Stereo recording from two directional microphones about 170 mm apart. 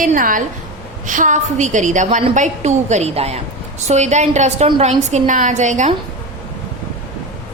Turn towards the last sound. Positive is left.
turn(degrees=-45)  # may be behind; listen again after turning